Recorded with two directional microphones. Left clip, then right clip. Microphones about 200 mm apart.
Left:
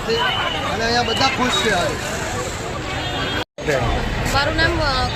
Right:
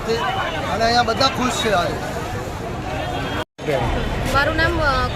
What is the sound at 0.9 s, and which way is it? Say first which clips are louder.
Speech: even; 10° right (ahead or behind).